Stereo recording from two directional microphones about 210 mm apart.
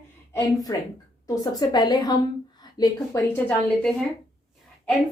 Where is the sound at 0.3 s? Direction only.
15° left (ahead or behind).